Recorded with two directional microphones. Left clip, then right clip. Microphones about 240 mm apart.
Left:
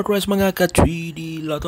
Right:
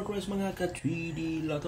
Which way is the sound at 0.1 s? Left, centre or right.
Left.